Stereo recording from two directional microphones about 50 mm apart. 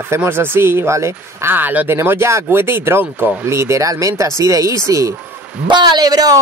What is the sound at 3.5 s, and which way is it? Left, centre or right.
Speech, right.